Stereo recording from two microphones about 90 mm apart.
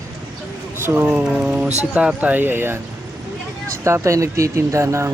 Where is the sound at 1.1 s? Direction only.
10° right (ahead or behind).